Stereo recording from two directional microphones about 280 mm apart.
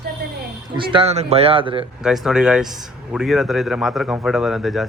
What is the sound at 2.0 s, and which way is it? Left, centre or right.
A man's voice, centre.